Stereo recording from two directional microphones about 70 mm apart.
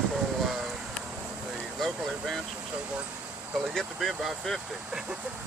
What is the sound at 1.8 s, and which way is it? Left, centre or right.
Speech, centre.